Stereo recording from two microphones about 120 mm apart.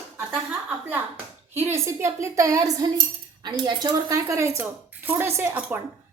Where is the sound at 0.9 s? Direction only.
15° right (ahead or behind).